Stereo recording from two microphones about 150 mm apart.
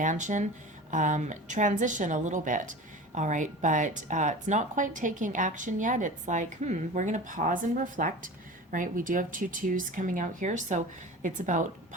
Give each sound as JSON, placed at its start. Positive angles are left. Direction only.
{"t": 0.0, "sound": "speech", "side_deg": -55}